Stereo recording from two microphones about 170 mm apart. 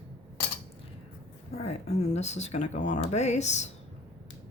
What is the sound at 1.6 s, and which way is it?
Speech, 35° left (ahead or behind).